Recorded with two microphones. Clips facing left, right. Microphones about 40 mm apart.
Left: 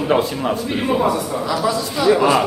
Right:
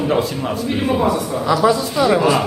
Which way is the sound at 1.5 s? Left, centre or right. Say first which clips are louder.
Right 7 dB; right.